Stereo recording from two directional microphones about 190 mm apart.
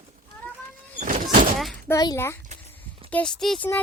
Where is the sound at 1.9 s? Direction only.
15° left (ahead or behind); by 3.6 s centre (ahead or behind).